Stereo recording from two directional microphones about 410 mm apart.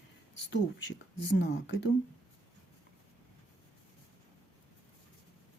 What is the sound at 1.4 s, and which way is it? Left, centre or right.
Speech, left.